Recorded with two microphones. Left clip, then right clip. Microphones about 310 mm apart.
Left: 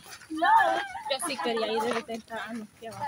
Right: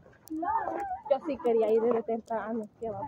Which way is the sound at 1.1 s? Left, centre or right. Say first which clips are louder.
Right 3 dB; right.